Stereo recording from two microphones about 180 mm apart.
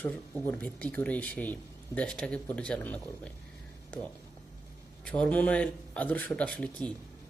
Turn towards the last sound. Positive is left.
turn(degrees=5)  # may be behind; listen again after turning